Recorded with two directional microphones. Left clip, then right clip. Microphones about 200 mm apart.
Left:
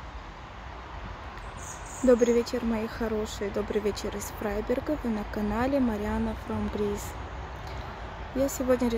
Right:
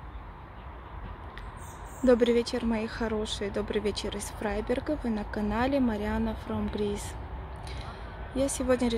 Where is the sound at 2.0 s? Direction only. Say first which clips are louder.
Left 1 dB; centre (ahead or behind).